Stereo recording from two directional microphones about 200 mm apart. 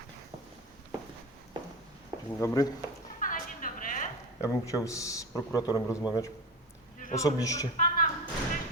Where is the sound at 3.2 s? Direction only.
45° left (ahead or behind).